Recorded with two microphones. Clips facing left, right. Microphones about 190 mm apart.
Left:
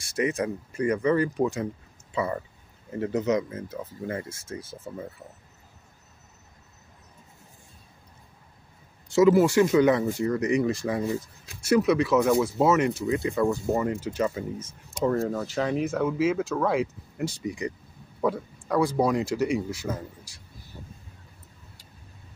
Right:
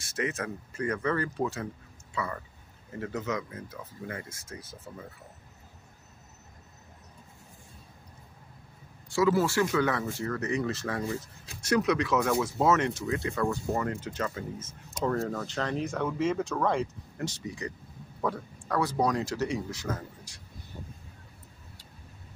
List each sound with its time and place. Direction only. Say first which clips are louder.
0.0 s speech: left 6 dB; 15° left (ahead or behind)
9.1 s speech: left 7 dB; 20° left (ahead or behind)